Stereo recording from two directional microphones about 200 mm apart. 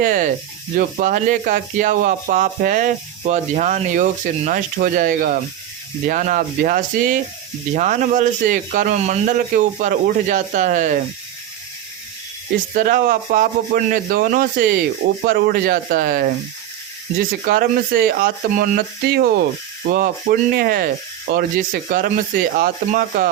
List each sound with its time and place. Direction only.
0.0 s speech: 40° right (ahead or behind)
12.7 s speech: 40° right (ahead or behind)
17.4 s speech: 45° right (ahead or behind)